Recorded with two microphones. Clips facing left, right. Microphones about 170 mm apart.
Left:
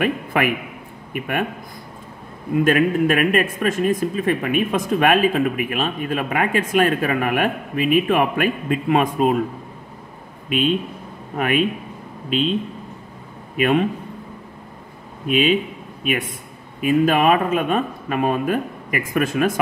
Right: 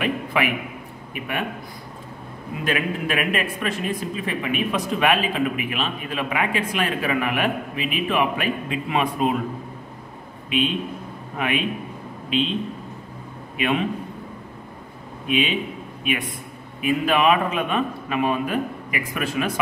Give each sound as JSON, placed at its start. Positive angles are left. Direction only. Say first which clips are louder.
{"t": 0.0, "sound": "a sound", "louder": "left 3 dB", "side_deg": 50}
{"t": 2.6, "sound": "speech", "louder": "left 8 dB", "side_deg": 45}
{"t": 11.3, "sound": "speech", "louder": "left 5 dB", "side_deg": 45}
{"t": 13.6, "sound": "speech", "louder": "left 5 dB", "side_deg": 45}
{"t": 15.2, "sound": "speech", "louder": "left 5 dB", "side_deg": 45}